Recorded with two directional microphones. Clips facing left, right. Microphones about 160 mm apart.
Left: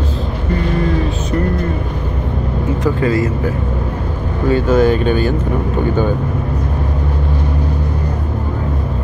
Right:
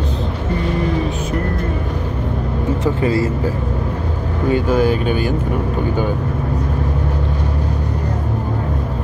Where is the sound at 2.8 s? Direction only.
30° right (ahead or behind).